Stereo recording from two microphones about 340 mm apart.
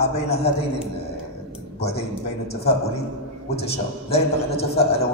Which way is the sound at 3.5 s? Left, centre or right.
Centre.